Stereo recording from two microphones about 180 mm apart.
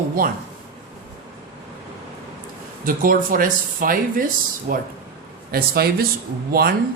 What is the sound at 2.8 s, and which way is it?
Speech, 50° right (ahead or behind).